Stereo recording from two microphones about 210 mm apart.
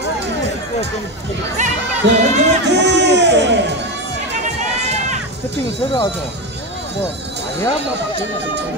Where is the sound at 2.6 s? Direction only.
55° right (ahead or behind).